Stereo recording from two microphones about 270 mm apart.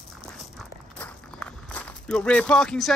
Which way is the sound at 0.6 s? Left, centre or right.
Centre.